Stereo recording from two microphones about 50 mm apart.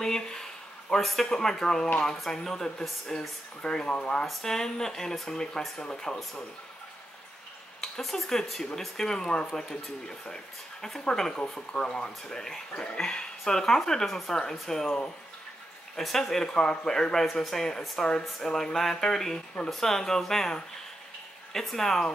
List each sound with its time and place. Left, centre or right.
0.0 s speech: centre
4.3 s speech: centre
7.8 s speech: centre
16.0 s speech: centre
21.5 s speech: centre